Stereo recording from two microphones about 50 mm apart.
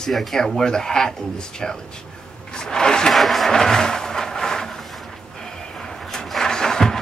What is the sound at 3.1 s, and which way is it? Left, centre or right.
Vehicle, centre.